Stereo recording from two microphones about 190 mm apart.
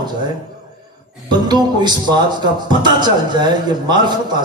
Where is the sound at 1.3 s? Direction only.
20° right (ahead or behind).